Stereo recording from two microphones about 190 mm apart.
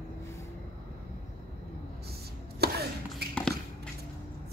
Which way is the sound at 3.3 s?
5° left (ahead or behind).